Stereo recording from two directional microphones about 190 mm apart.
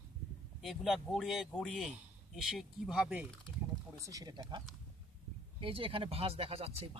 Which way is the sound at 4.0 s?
20° right (ahead or behind).